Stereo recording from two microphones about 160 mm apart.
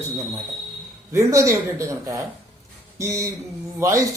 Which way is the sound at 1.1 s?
20° right (ahead or behind).